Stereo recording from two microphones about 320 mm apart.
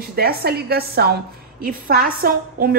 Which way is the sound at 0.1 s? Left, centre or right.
Right.